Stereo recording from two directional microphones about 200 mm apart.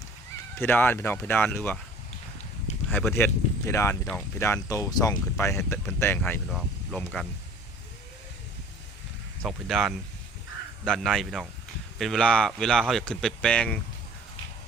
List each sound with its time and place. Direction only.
0.5 s speech: 10° left (ahead or behind)
2.9 s speech: centre (ahead or behind)
3.2 s speech: 10° left (ahead or behind)
9.5 s speech: centre (ahead or behind)